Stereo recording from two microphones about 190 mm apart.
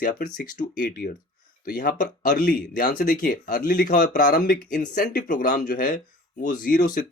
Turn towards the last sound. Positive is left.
turn(degrees=45)  # may be behind; listen again after turning